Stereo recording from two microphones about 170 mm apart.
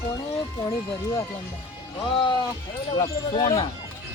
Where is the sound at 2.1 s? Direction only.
30° left (ahead or behind).